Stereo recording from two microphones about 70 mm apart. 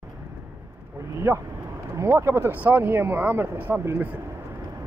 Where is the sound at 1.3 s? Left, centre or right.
Right.